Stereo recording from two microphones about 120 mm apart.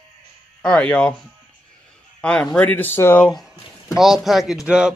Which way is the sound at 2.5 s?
15° left (ahead or behind).